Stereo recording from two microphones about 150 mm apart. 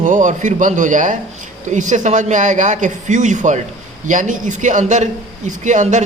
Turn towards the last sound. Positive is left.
turn(degrees=-55)  # may be behind; listen again after turning